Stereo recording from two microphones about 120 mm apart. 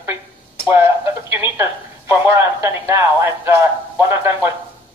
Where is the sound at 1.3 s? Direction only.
20° right (ahead or behind).